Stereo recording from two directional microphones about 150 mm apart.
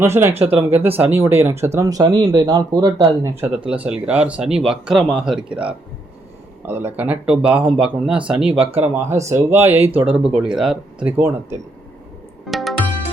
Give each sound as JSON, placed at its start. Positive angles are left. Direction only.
{"t": 0.0, "sound": "speech", "side_deg": -15}
{"t": 3.7, "sound": "speech", "side_deg": -10}
{"t": 6.7, "sound": "speech", "side_deg": -15}
{"t": 9.7, "sound": "speech", "side_deg": -40}
{"t": 10.0, "sound": "speech", "side_deg": -10}
{"t": 11.2, "sound": "speech", "side_deg": -15}
{"t": 12.5, "sound": "music", "side_deg": 0}